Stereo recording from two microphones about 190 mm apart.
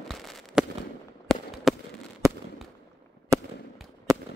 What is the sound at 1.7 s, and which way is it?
Fireworks, centre (ahead or behind).